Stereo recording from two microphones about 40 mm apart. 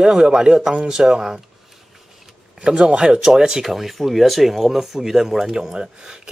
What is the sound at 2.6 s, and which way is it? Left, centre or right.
Speech, right.